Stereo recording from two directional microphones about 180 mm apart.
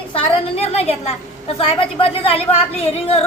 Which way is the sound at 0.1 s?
35° left (ahead or behind).